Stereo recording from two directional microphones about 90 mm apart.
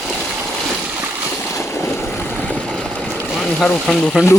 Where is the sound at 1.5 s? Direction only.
30° left (ahead or behind); by 3.2 s 15° left (ahead or behind).